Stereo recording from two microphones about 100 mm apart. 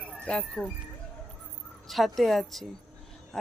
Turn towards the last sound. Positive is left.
turn(degrees=5)  # may be behind; listen again after turning